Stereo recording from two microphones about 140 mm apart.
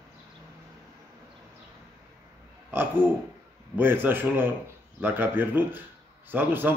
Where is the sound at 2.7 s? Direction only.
15° right (ahead or behind).